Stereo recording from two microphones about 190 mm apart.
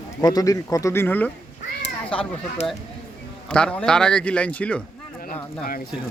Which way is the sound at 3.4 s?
5° left (ahead or behind).